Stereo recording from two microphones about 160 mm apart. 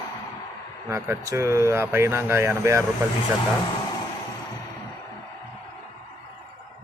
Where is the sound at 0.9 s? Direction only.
20° right (ahead or behind).